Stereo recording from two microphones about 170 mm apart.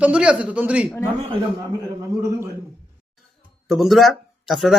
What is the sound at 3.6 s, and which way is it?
Speech, centre (ahead or behind).